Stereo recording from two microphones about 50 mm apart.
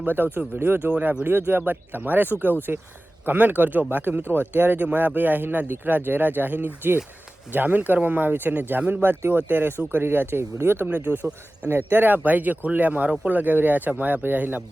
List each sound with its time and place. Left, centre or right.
0.0 s speech: right
10.9 s speech: right